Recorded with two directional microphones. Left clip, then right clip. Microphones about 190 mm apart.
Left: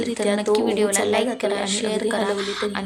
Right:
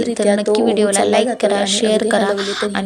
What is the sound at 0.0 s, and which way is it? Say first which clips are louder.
A woman's voice: right 6 dB; 15° right (ahead or behind).